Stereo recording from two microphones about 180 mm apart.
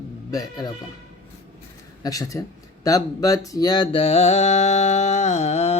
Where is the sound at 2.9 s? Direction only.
20° left (ahead or behind).